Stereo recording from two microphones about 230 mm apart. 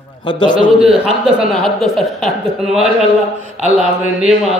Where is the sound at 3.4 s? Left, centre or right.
Right.